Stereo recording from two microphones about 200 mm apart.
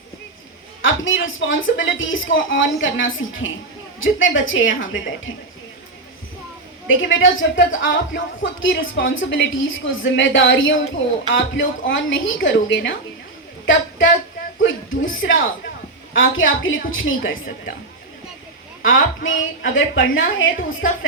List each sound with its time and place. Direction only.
0.8 s a woman's voice: 75° left (ahead or behind)
6.8 s a woman's voice: 75° left (ahead or behind)
14.6 s a woman's voice: 70° left (ahead or behind)
18.9 s a woman's voice: 80° left